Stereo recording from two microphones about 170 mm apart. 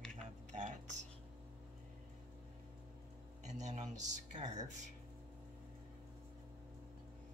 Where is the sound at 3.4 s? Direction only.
45° right (ahead or behind).